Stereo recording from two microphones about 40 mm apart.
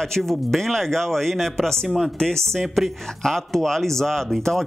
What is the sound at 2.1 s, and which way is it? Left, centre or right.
Speech, centre.